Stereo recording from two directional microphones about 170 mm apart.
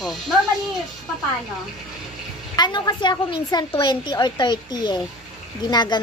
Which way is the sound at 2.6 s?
25° left (ahead or behind).